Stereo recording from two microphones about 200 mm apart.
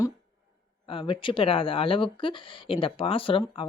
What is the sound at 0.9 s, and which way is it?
Speech, 25° left (ahead or behind).